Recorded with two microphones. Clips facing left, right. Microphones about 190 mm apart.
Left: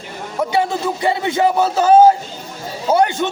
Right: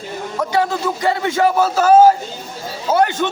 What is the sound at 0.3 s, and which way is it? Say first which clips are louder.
Speech: left 1 dB; 20° left (ahead or behind).